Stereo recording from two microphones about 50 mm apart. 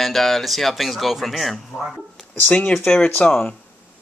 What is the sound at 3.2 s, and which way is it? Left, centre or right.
Speech, centre.